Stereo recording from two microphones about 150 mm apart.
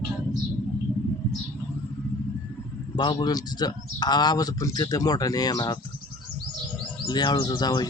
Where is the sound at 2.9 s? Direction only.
25° left (ahead or behind).